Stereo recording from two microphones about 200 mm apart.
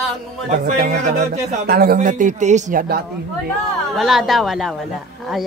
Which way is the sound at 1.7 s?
45° right (ahead or behind).